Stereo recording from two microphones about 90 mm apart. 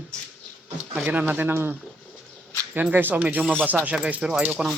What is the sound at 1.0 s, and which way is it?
Speech, 20° right (ahead or behind).